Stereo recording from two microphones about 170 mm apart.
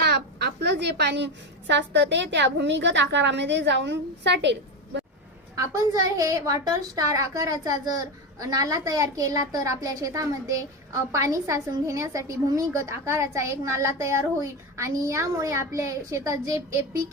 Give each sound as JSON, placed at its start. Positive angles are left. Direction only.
{"t": 0.0, "sound": "a woman's voice", "side_deg": -75}
{"t": 5.5, "sound": "a woman's voice", "side_deg": -20}